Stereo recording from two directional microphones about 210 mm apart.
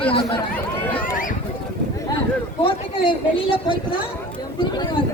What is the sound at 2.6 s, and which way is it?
Speech, 25° left (ahead or behind).